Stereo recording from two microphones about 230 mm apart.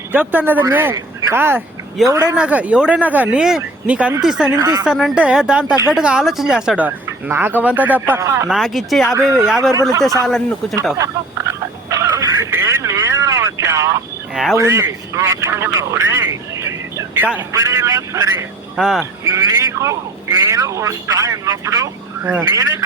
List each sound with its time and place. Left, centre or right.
0.1 s speech: centre
4.6 s a man's voice: centre
4.9 s a man's voice: centre
10.9 s a man's voice: centre
11.9 s telephone: centre
14.5 s speech: centre
18.8 s speech: centre
19.3 s a man's voice: centre